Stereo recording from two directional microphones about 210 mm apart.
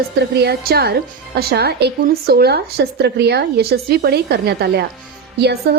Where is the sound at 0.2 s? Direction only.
50° right (ahead or behind).